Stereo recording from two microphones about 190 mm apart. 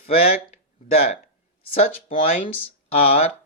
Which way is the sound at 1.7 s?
30° left (ahead or behind).